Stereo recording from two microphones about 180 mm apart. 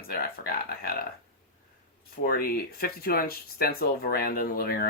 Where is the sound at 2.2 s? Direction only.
55° left (ahead or behind).